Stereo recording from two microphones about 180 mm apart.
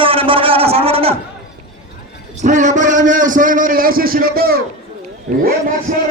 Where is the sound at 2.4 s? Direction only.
40° right (ahead or behind); by 4.6 s 60° right (ahead or behind).